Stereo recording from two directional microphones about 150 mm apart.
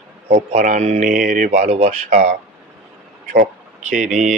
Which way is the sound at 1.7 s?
45° right (ahead or behind).